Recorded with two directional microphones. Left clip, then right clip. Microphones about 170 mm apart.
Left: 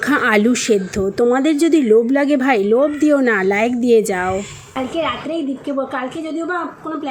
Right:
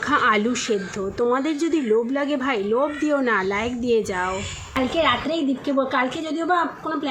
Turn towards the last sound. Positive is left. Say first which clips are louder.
# even
turn(degrees=-5)  # may be behind; listen again after turning